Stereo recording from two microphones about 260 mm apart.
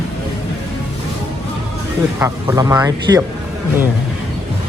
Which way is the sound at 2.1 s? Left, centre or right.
Centre.